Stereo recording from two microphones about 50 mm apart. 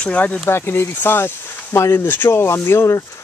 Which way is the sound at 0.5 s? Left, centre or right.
Left.